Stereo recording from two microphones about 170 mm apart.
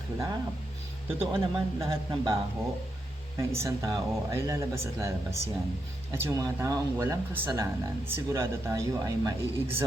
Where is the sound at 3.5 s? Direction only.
15° right (ahead or behind).